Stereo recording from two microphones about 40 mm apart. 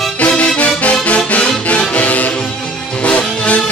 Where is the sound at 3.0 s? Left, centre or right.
Left.